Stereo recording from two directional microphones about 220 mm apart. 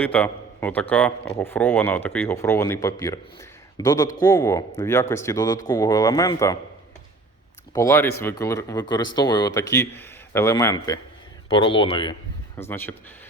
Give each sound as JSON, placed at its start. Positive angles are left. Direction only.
{"t": 0.0, "sound": "a man's voice", "side_deg": 5}
{"t": 7.7, "sound": "speech", "side_deg": 15}
{"t": 12.5, "sound": "speech", "side_deg": 10}